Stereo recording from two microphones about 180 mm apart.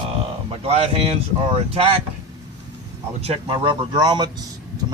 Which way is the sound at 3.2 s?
30° right (ahead or behind).